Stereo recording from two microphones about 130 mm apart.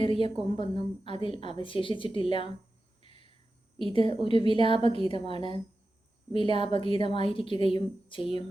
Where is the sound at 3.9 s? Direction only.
40° left (ahead or behind).